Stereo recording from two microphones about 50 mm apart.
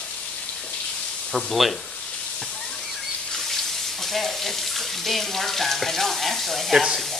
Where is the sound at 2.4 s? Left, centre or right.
Centre.